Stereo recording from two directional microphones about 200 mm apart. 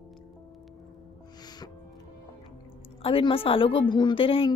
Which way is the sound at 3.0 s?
25° left (ahead or behind).